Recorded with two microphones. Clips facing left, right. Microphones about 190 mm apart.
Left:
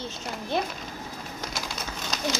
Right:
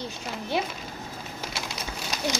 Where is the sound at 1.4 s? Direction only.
5° right (ahead or behind).